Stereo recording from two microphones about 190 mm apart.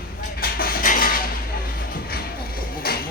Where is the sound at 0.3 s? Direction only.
50° left (ahead or behind).